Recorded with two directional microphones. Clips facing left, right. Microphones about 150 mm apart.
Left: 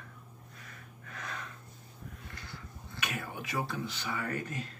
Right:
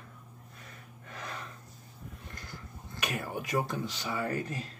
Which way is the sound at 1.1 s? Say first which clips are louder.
Right 1 dB; 30° right (ahead or behind).